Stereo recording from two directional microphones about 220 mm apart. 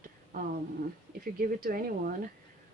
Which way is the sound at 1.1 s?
40° right (ahead or behind).